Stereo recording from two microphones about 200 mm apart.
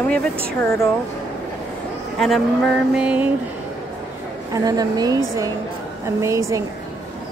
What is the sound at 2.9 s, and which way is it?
Speech, 5° right (ahead or behind).